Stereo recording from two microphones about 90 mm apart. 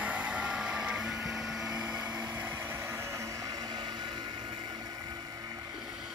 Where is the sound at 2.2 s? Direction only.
20° right (ahead or behind); by 5.6 s 45° right (ahead or behind).